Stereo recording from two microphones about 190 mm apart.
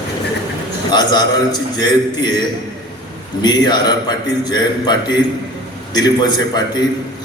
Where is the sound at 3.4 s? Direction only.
20° left (ahead or behind).